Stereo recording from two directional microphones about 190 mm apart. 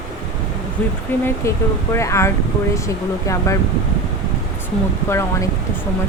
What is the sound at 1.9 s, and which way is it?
Speech, 15° left (ahead or behind).